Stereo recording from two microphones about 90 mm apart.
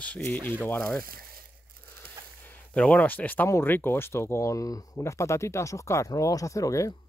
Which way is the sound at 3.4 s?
35° left (ahead or behind).